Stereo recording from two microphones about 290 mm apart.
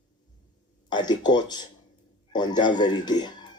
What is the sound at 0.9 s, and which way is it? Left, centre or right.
A man's voice, centre.